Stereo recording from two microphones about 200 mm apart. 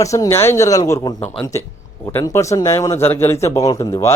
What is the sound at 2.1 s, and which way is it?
Speech, 15° left (ahead or behind).